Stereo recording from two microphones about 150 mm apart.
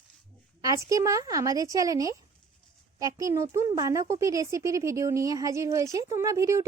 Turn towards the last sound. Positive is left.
turn(degrees=-20)  # may be behind; listen again after turning